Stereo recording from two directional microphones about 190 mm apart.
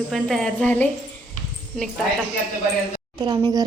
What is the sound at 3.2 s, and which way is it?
Speech, 20° right (ahead or behind).